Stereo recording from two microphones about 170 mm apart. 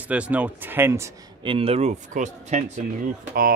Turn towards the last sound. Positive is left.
turn(degrees=-55)  # may be behind; listen again after turning